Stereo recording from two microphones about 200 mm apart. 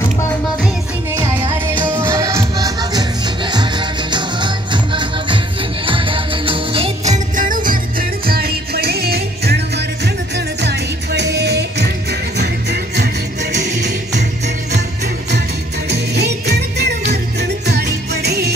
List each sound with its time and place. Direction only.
1.2 s music: 25° right (ahead or behind)
2.0 s music: 15° right (ahead or behind)
5.9 s music: 25° right (ahead or behind)
7.3 s music: 40° right (ahead or behind)
15.9 s music: 55° right (ahead or behind)